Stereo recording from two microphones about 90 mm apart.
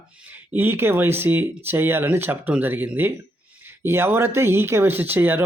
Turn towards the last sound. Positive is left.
turn(degrees=-20)  # may be behind; listen again after turning